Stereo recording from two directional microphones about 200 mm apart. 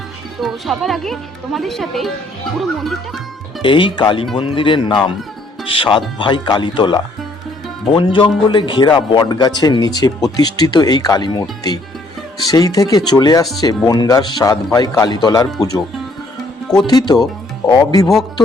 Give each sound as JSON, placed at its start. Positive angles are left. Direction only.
{"t": 0.3, "sound": "speech", "side_deg": 0}
{"t": 3.6, "sound": "speech", "side_deg": 25}
{"t": 16.8, "sound": "speech", "side_deg": 20}